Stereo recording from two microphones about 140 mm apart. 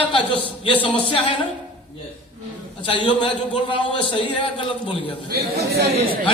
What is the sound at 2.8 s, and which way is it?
Speech, 40° left (ahead or behind).